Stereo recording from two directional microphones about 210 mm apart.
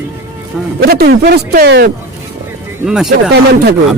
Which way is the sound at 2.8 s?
5° right (ahead or behind).